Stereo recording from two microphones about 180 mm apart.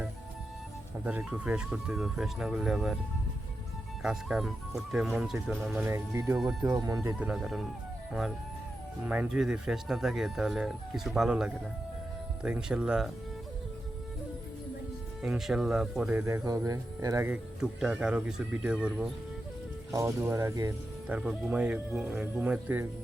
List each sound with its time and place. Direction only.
1.0 s speech: 5° right (ahead or behind)
4.0 s speech: 5° right (ahead or behind)
5.8 s speech: 15° right (ahead or behind)
7.2 s speech: 5° right (ahead or behind)
9.0 s speech: 5° right (ahead or behind)
15.2 s speech: 5° right (ahead or behind)
16.2 s speech: 15° right (ahead or behind)
21.2 s speech: 5° right (ahead or behind)